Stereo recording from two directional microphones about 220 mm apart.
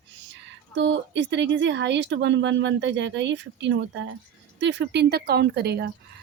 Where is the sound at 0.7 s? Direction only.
55° right (ahead or behind).